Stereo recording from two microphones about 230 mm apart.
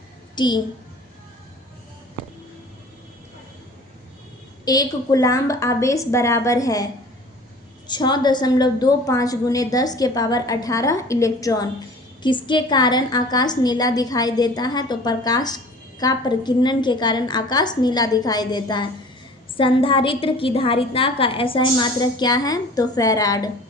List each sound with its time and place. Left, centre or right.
0.3 s a child's voice: centre
4.6 s a woman's voice: centre
7.9 s a woman's voice: centre